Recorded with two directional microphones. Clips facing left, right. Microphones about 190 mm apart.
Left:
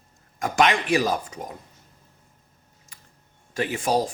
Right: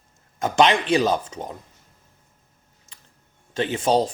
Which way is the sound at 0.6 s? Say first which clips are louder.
Right 3 dB; 25° right (ahead or behind).